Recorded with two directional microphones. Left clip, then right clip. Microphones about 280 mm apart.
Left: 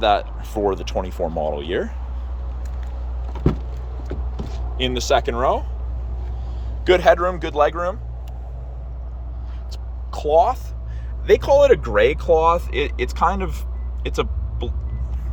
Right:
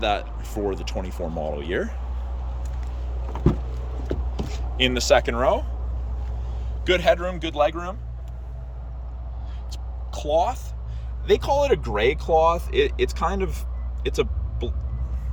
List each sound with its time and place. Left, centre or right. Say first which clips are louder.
0.0 s speech: left 6 dB; centre
4.4 s a sound: right 1 dB; right
4.8 s speech: even; centre
6.8 s speech: left 5 dB; centre
10.1 s speech: left 6 dB; centre